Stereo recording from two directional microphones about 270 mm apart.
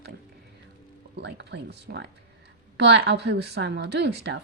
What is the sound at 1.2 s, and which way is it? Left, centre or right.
A woman's voice, right.